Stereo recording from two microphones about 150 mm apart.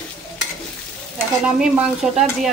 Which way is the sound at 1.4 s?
5° right (ahead or behind).